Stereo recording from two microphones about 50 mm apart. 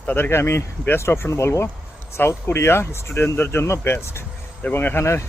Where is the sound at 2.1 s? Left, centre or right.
Left.